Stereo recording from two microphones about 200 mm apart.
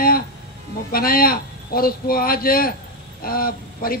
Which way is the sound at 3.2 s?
45° left (ahead or behind).